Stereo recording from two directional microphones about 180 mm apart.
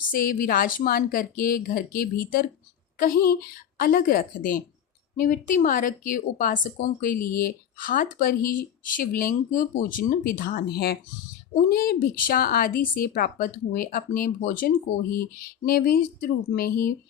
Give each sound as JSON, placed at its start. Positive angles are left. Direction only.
{"t": 0.1, "sound": "speech", "side_deg": 50}